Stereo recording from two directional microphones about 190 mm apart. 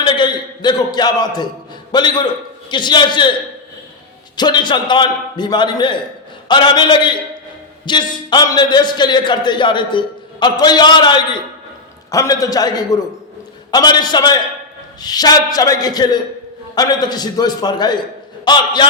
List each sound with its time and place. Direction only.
0.0 s a sound: 25° left (ahead or behind)
1.9 s a man's voice: 20° left (ahead or behind)
4.4 s a man's voice: 20° left (ahead or behind)